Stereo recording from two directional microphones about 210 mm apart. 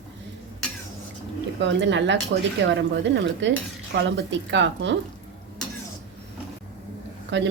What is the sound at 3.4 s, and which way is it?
Cutlery, 60° right (ahead or behind).